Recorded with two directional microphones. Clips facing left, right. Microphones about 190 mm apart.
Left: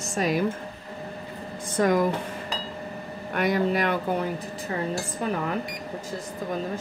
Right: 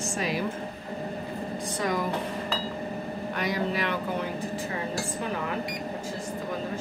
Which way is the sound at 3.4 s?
50° left (ahead or behind).